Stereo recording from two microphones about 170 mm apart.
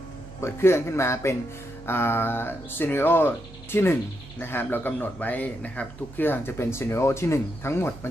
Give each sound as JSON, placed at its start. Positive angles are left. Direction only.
{"t": 0.4, "sound": "speech", "side_deg": 15}